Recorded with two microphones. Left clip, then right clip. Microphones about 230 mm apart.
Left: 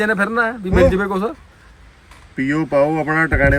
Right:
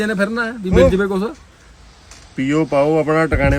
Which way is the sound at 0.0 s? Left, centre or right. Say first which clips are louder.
Left 2 dB; centre.